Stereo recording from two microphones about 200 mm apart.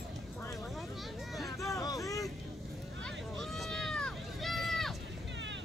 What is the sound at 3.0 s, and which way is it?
Run, centre (ahead or behind).